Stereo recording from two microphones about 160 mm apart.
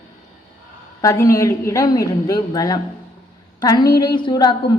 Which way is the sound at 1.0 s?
20° left (ahead or behind).